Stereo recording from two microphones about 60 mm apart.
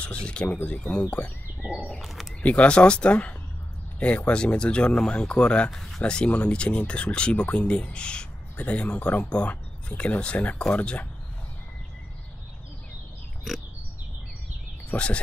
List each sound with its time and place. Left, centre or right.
0.0 s speech: centre
1.6 s a sound: centre
2.0 s speech: centre
2.4 s speech: left
5.7 s speech: centre
6.0 s speech: centre
14.9 s speech: centre